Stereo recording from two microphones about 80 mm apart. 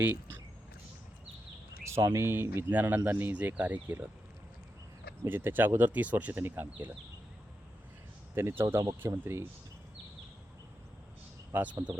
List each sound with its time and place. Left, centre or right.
0.0 s speech: right
1.9 s speech: right
5.3 s speech: right
8.4 s speech: right
11.5 s speech: centre